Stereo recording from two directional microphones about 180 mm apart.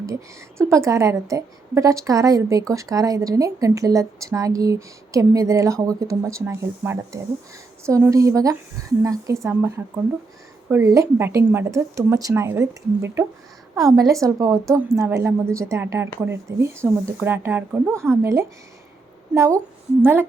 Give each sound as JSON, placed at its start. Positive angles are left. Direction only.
{"t": 0.6, "sound": "a woman's voice", "side_deg": -15}